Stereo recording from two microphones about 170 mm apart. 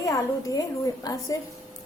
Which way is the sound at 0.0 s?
20° left (ahead or behind).